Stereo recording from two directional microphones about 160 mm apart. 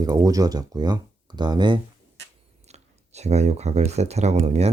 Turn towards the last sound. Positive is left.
turn(degrees=-40)  # may be behind; listen again after turning